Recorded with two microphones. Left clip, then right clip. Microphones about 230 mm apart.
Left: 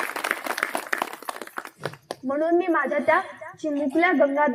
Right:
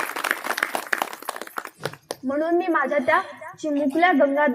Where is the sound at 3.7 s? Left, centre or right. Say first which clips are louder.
Right 2 dB; right.